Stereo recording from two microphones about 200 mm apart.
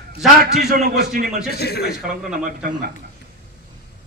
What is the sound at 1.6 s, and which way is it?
Speech, 55° left (ahead or behind).